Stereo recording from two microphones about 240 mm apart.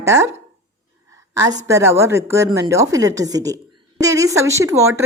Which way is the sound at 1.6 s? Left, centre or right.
Centre.